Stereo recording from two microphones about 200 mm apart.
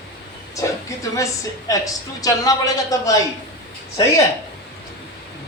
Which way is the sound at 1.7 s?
15° left (ahead or behind).